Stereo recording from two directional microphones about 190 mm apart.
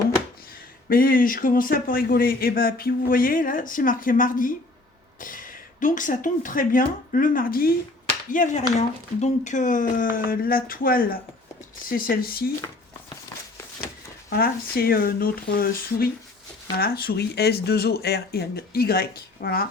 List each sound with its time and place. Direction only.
0.9 s speech: 50° left (ahead or behind)
14.3 s speech: 50° left (ahead or behind)